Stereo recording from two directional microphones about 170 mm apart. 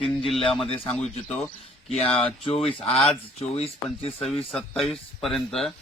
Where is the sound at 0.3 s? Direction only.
Centre (ahead or behind).